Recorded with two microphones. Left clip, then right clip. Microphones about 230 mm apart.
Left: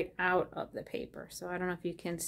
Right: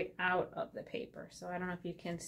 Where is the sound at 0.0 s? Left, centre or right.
Left.